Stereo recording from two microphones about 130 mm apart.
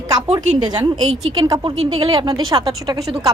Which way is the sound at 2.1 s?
30° right (ahead or behind).